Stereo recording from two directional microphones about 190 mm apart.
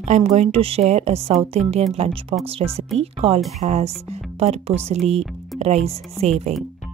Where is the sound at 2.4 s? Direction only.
30° right (ahead or behind).